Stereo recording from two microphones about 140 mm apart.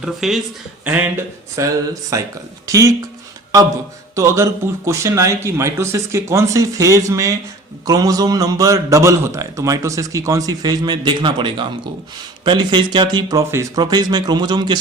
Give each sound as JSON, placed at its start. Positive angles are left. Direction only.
{"t": 0.0, "sound": "speech", "side_deg": 0}
{"t": 0.9, "sound": "a man's voice", "side_deg": -20}
{"t": 4.1, "sound": "a man's voice", "side_deg": -20}